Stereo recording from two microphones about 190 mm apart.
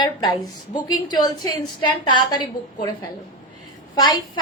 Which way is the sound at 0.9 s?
20° left (ahead or behind).